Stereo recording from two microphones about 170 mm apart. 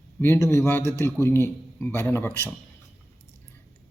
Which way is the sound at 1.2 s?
15° left (ahead or behind).